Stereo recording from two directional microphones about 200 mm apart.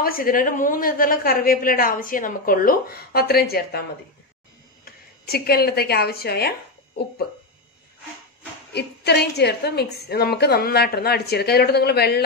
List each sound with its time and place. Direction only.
0.0 s a woman's voice: 45° left (ahead or behind)
4.8 s speech: 50° left (ahead or behind)
8.7 s a woman's voice: 55° left (ahead or behind)